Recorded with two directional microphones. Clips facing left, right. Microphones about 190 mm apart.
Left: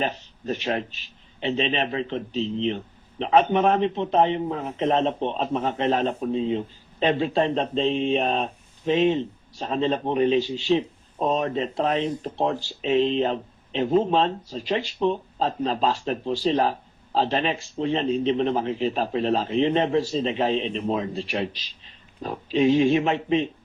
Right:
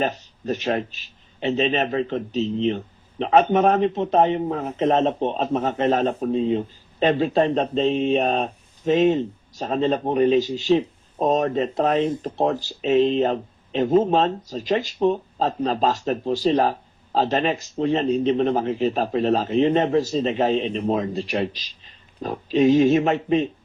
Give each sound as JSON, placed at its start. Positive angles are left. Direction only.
{"t": 0.0, "sound": "speech", "side_deg": -40}